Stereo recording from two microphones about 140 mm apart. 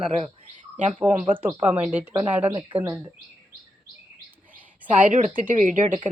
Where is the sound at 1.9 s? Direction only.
10° right (ahead or behind).